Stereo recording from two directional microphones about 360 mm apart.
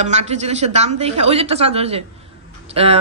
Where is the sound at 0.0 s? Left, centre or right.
Centre.